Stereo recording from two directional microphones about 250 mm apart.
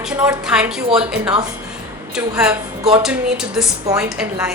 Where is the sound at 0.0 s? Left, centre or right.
Centre.